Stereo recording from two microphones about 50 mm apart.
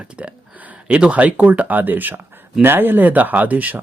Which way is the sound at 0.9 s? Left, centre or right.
Right.